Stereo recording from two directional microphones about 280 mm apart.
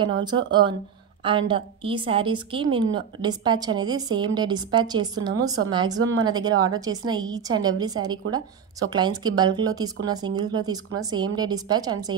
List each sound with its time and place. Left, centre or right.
0.2 s a woman's voice: centre